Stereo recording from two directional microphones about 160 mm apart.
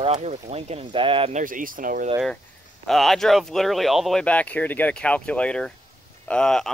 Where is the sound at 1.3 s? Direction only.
55° right (ahead or behind).